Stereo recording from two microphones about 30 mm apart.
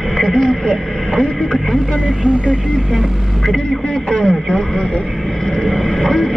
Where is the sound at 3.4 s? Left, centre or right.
Centre.